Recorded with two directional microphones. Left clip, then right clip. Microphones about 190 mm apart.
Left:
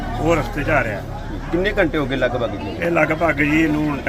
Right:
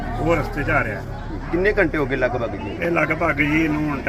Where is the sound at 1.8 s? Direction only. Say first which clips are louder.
Left 1 dB; 35° left (ahead or behind).